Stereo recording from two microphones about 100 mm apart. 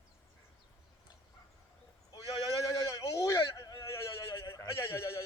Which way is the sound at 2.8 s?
30° left (ahead or behind).